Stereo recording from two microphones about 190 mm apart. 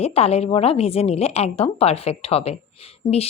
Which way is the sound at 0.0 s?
30° left (ahead or behind).